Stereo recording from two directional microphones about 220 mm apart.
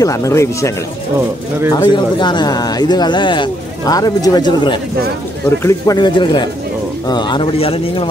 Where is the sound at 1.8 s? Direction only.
20° left (ahead or behind).